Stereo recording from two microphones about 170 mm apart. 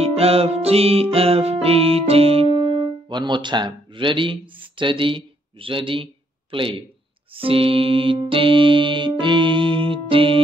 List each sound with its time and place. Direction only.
0.0 s music: 35° right (ahead or behind)
6.5 s speech: 30° right (ahead or behind)
7.3 s music: 35° right (ahead or behind)